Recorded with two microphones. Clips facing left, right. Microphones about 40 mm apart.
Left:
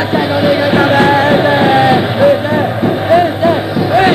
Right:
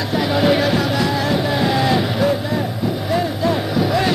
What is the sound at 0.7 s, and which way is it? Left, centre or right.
Music, left.